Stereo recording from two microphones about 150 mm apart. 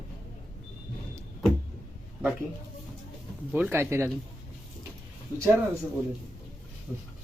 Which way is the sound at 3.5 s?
15° right (ahead or behind).